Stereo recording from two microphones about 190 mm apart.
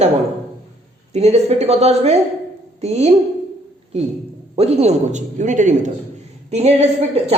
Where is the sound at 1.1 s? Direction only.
35° right (ahead or behind).